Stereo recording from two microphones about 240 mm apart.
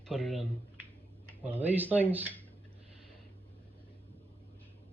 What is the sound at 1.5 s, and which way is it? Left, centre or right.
Speech, centre.